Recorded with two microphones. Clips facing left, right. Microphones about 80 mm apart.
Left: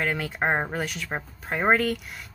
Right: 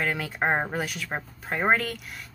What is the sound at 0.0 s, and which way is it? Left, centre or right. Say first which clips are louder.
Speech: left 1 dB; centre.